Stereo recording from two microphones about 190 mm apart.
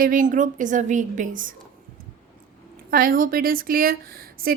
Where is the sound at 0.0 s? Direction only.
45° right (ahead or behind).